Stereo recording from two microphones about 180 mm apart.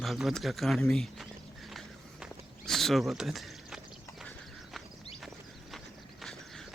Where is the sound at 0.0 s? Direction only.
Centre (ahead or behind).